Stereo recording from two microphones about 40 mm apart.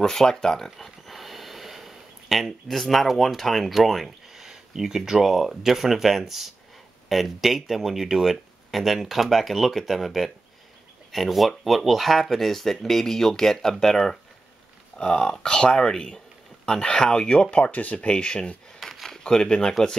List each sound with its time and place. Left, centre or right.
0.0 s speech: centre
0.7 s snort: centre
4.4 s speech: centre; by 17.6 s left
17.6 s speech: left
17.9 s speech: left
18.8 s a sound: centre
19.0 s speech: centre